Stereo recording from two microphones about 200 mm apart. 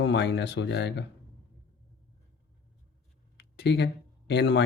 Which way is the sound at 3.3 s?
60° left (ahead or behind).